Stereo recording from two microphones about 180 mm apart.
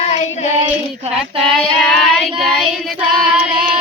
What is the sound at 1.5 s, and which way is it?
Child singing, centre (ahead or behind).